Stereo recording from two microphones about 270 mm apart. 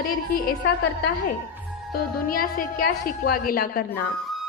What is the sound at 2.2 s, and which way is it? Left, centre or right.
A woman's voice, left.